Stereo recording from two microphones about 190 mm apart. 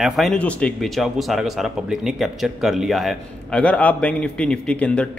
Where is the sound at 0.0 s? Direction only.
Centre (ahead or behind).